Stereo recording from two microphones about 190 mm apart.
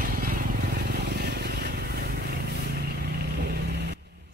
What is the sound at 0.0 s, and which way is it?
Vehicle, 50° right (ahead or behind).